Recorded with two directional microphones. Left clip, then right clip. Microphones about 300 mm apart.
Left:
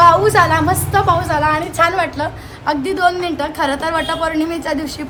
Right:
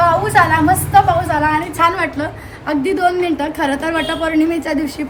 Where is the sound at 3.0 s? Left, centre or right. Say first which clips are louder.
Even; left.